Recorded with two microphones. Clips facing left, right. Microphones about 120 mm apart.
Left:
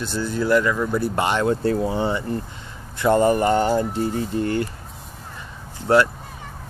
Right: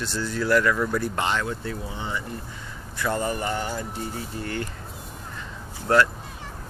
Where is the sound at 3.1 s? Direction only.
45° left (ahead or behind).